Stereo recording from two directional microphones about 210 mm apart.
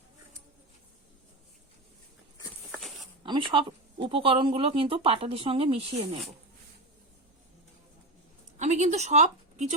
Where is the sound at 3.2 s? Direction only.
25° right (ahead or behind).